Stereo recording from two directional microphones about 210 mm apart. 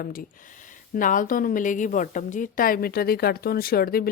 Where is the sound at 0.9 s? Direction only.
40° left (ahead or behind).